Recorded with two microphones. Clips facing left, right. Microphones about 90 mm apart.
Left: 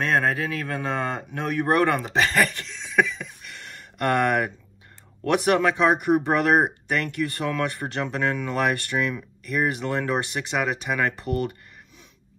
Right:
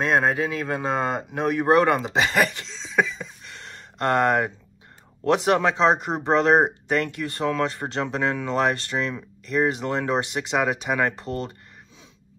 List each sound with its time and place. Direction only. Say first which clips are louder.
0.0 s speech: right 2 dB; 25° right (ahead or behind)